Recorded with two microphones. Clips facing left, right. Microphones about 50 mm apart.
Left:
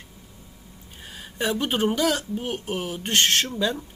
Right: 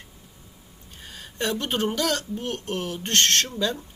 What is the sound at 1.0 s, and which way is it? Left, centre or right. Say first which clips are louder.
A woman's voice: left 1 dB; centre.